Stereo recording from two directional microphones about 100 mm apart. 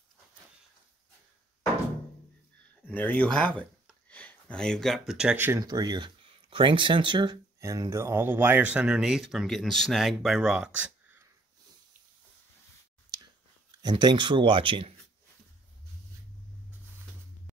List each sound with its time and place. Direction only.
2.9 s speech: 15° left (ahead or behind); by 5.3 s 5° right (ahead or behind)
5.3 s speech: 20° right (ahead or behind)
5.6 s speech: 45° right (ahead or behind)
7.6 s speech: 35° right (ahead or behind); by 11.1 s 10° right (ahead or behind)
13.8 s speech: 45° right (ahead or behind)